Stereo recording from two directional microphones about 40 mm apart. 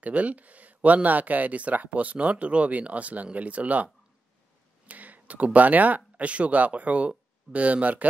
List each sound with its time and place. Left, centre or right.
0.0 s speech: right